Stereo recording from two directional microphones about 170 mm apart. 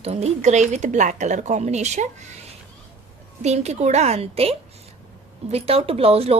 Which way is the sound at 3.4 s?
40° right (ahead or behind).